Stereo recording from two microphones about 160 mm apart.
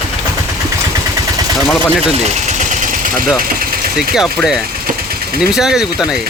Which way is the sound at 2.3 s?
45° right (ahead or behind).